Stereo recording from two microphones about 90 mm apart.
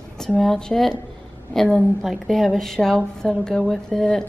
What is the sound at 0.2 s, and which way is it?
A woman's voice, 5° left (ahead or behind).